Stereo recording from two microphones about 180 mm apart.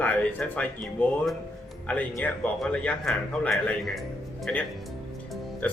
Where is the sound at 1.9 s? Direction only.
5° left (ahead or behind).